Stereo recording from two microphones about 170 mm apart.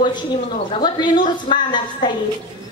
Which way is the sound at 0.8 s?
25° left (ahead or behind).